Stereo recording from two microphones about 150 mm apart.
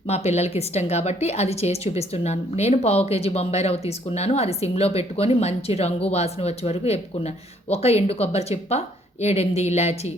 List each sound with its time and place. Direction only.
0.1 s a woman's voice: 45° left (ahead or behind)